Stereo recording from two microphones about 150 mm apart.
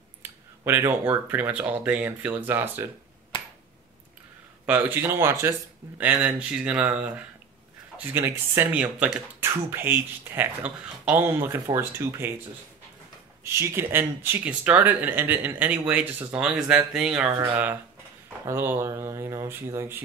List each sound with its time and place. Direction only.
0.2 s speech: 15° right (ahead or behind)
4.6 s speech: 10° right (ahead or behind)
13.4 s speech: 20° right (ahead or behind)